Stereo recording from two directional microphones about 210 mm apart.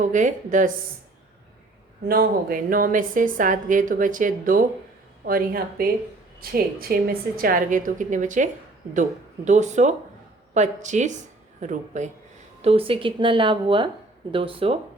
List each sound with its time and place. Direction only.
0.0 s a woman's voice: 35° right (ahead or behind)
2.0 s a woman's voice: 45° right (ahead or behind); by 14.8 s 25° right (ahead or behind)